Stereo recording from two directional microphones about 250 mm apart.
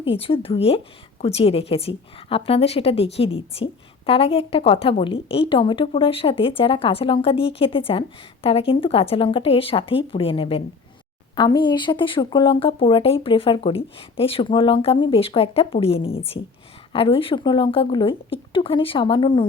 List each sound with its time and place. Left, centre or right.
0.0 s a woman's voice: left